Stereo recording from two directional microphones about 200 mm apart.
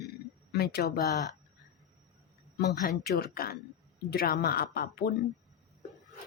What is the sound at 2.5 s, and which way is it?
Speech, 55° left (ahead or behind).